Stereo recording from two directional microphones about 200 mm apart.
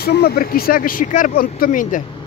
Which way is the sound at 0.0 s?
50° left (ahead or behind).